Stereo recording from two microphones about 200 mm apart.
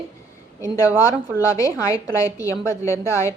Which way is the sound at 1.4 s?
15° left (ahead or behind).